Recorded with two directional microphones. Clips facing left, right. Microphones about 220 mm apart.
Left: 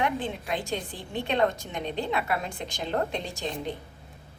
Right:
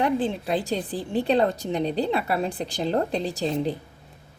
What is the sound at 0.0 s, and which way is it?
A woman's voice, 35° right (ahead or behind).